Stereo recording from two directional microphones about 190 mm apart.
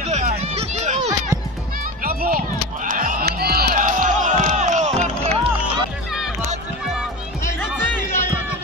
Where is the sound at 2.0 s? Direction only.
50° right (ahead or behind).